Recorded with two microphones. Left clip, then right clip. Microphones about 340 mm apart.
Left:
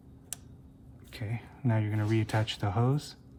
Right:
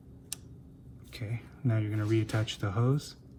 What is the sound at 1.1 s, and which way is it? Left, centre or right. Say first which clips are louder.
Speech: left 1 dB; left.